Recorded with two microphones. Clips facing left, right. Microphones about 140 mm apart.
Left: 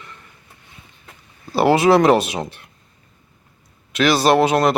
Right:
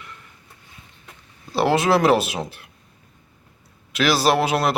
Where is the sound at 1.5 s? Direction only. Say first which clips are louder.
Left 4 dB; centre (ahead or behind).